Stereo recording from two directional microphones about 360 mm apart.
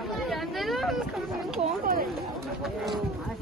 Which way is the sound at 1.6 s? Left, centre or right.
Right.